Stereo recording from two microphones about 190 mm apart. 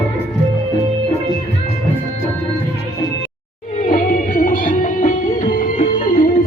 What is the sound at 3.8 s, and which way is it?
Music, 45° left (ahead or behind).